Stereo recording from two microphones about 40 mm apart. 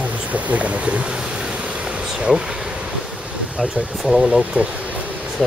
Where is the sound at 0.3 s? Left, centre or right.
Right.